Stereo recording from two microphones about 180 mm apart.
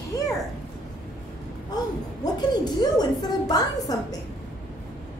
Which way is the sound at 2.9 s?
20° left (ahead or behind).